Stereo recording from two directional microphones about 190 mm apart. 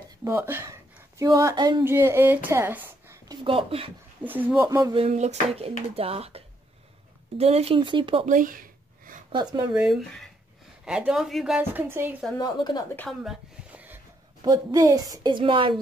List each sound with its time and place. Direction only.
0.2 s speech: 10° right (ahead or behind)
3.4 s a woman's voice: 30° right (ahead or behind)
4.2 s speech: 10° right (ahead or behind)
5.0 s a woman's voice: 35° right (ahead or behind)
8.3 s a sound: 45° right (ahead or behind)
9.3 s a woman's voice: 20° right (ahead or behind)
9.8 s speech: 5° right (ahead or behind)
12.4 s speech: 20° left (ahead or behind)
13.2 s a sound: 5° right (ahead or behind)
14.4 s a woman's voice: 20° right (ahead or behind)